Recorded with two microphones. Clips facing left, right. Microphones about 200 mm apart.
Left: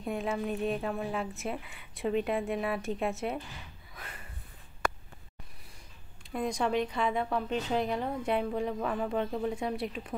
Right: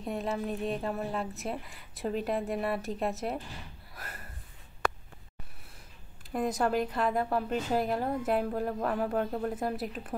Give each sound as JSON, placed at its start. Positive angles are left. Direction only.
{"t": 0.0, "sound": "speech", "side_deg": 0}
{"t": 3.9, "sound": "a sound", "side_deg": -5}
{"t": 6.3, "sound": "speech", "side_deg": -5}